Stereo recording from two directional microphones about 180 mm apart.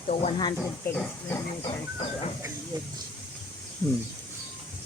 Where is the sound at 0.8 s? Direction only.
10° left (ahead or behind).